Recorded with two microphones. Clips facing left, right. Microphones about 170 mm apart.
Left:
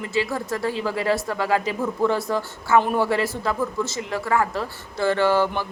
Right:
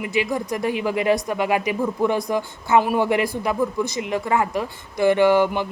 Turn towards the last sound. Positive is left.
turn(degrees=-15)  # may be behind; listen again after turning